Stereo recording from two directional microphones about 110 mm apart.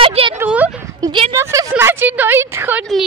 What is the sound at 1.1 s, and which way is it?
Speech, 55° right (ahead or behind).